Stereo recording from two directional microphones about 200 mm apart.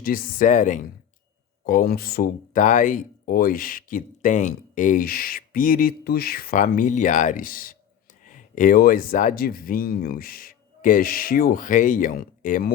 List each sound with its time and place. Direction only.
0.0 s speech: 45° left (ahead or behind)